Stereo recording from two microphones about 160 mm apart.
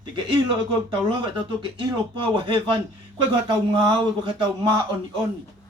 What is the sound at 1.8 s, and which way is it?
Speech, 30° right (ahead or behind).